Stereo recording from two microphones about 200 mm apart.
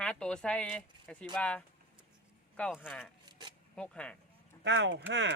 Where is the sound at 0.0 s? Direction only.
5° left (ahead or behind).